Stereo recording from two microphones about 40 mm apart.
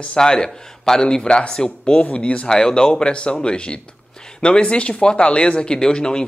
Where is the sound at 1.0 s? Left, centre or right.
Left.